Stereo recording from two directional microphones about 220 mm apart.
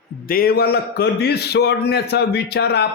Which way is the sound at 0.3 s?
45° left (ahead or behind).